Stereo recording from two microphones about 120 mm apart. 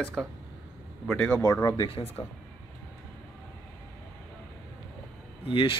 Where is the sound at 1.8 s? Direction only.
55° left (ahead or behind).